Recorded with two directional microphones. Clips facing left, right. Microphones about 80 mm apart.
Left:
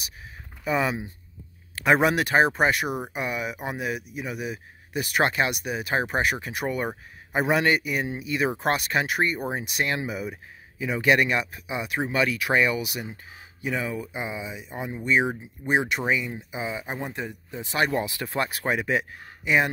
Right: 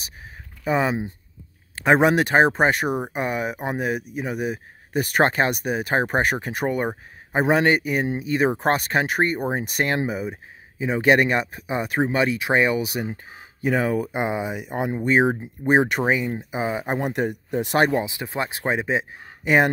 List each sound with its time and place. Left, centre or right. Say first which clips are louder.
0.7 s speech: right 3 dB; right
17.9 s speech: right 2 dB; right
19.4 s speech: right 4 dB; right